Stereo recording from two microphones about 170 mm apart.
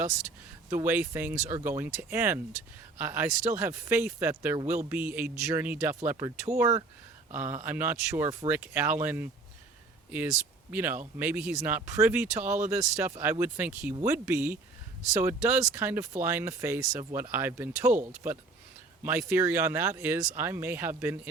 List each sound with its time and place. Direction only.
0.7 s speech: 15° right (ahead or behind)